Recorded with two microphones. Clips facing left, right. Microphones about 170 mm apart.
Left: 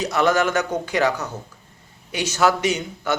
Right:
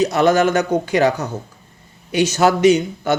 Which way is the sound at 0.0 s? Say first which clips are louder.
Right 5 dB; 20° right (ahead or behind).